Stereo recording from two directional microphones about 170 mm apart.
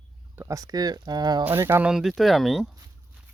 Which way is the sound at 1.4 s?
15° right (ahead or behind).